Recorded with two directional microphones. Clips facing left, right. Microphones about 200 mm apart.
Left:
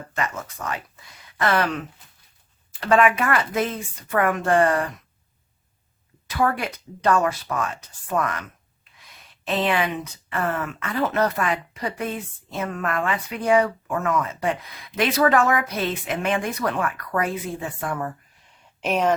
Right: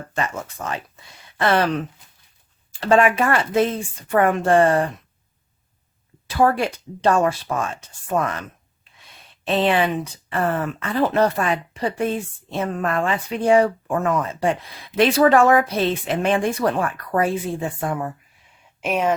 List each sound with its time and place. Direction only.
0.1 s speech: 30° right (ahead or behind)
2.8 s speech: 30° right (ahead or behind)
6.2 s speech: 30° right (ahead or behind)
18.8 s speech: 5° right (ahead or behind)